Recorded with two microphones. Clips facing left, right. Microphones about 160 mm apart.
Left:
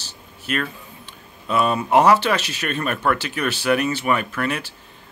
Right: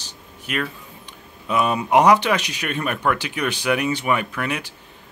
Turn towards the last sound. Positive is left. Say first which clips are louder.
# left 2 dB
turn(degrees=-15)  # may be behind; listen again after turning